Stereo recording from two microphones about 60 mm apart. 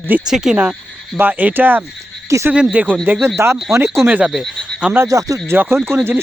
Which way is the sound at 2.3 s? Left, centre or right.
Right.